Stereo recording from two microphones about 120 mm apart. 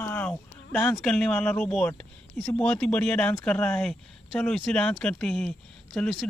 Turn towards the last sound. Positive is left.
turn(degrees=5)  # may be behind; listen again after turning